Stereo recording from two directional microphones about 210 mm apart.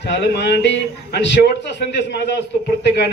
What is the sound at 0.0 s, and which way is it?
A man's voice, 55° left (ahead or behind).